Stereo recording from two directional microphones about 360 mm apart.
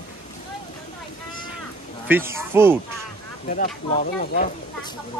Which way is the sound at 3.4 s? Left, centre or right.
Left.